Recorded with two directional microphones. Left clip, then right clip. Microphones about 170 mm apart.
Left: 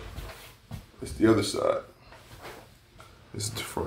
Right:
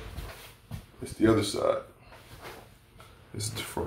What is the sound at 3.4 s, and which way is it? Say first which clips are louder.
Speech: left 1 dB; 15° left (ahead or behind).